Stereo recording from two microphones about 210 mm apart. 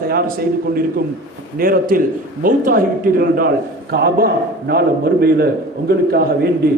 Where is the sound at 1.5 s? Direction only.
45° right (ahead or behind).